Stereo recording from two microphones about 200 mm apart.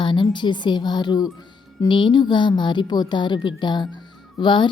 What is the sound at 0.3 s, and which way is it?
A woman's voice, 20° left (ahead or behind).